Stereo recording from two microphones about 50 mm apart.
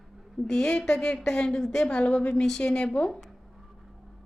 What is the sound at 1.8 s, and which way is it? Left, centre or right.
A woman's voice, left.